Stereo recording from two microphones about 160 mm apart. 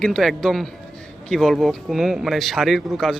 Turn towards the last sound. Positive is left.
turn(degrees=0)  # may be behind; listen again after turning